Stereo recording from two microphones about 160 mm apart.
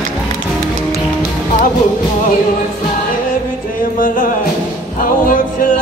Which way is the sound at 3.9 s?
60° left (ahead or behind).